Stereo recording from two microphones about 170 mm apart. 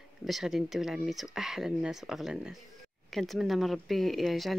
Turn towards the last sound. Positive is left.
turn(degrees=0)  # may be behind; listen again after turning